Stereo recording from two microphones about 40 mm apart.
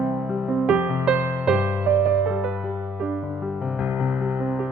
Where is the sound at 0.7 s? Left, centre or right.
Right.